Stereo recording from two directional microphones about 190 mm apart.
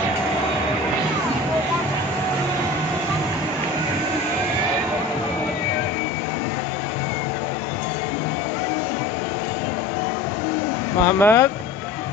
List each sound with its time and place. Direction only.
11.1 s speech: 10° left (ahead or behind)